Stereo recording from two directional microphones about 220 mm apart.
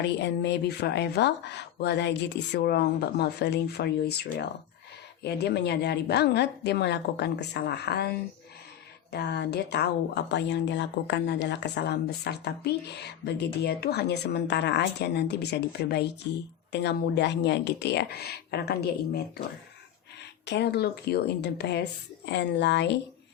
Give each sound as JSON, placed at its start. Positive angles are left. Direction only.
{"t": 0.0, "sound": "speech", "side_deg": 50}
{"t": 9.1, "sound": "speech", "side_deg": 50}
{"t": 20.4, "sound": "speech", "side_deg": 50}